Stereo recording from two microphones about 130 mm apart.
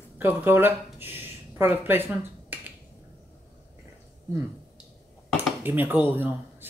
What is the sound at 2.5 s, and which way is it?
Finger snapping, 15° right (ahead or behind).